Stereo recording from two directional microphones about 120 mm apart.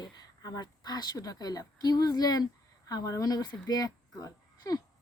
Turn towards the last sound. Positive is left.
turn(degrees=30)  # may be behind; listen again after turning